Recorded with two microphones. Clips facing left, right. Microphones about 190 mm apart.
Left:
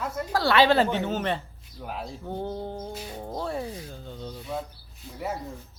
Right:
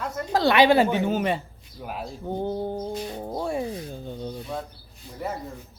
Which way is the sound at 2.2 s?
15° right (ahead or behind).